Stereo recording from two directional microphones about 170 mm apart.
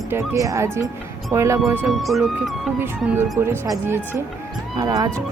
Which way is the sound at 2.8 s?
10° right (ahead or behind).